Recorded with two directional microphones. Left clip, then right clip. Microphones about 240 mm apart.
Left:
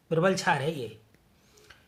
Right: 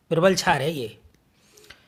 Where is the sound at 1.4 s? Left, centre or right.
Right.